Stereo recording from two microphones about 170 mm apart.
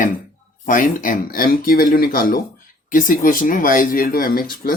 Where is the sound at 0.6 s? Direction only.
50° left (ahead or behind).